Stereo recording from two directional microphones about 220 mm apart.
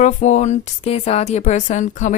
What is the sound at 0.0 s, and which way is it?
Speech, 35° left (ahead or behind).